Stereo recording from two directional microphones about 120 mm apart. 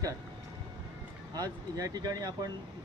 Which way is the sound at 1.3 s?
30° right (ahead or behind).